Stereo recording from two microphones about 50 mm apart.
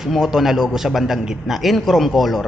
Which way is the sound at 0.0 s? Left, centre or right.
Centre.